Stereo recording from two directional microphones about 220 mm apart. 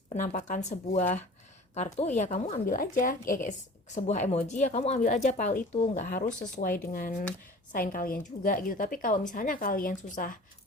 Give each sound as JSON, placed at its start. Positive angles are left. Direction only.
{"t": 0.1, "sound": "speech", "side_deg": 35}